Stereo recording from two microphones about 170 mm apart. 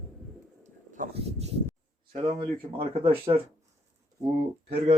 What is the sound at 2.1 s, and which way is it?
Speech, 30° right (ahead or behind).